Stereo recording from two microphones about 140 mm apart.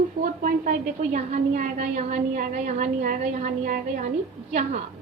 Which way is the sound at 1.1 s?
70° right (ahead or behind).